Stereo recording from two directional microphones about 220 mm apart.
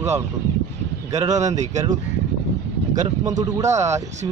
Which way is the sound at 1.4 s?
30° right (ahead or behind).